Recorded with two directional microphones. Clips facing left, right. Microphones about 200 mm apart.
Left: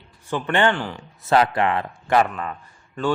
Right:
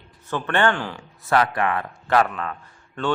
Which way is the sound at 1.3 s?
25° left (ahead or behind).